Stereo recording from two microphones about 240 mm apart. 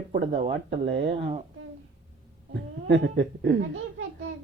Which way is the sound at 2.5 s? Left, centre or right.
Right.